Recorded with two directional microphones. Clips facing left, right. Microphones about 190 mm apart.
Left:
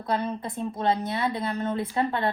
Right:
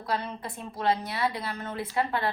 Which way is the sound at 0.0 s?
25° left (ahead or behind).